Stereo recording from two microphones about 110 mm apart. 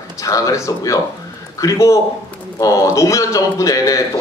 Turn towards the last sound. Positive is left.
turn(degrees=30)  # may be behind; listen again after turning